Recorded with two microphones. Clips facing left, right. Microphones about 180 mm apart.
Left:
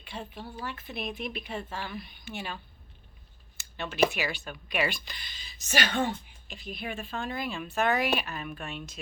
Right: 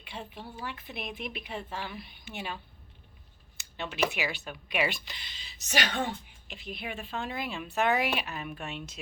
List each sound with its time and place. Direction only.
0.0 s a woman's voice: 20° right (ahead or behind)
3.6 s speech: 20° right (ahead or behind)